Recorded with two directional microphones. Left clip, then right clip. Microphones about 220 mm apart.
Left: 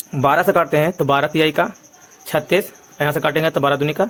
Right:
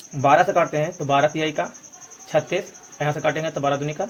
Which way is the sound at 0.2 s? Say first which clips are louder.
Left 2 dB; 45° left (ahead or behind).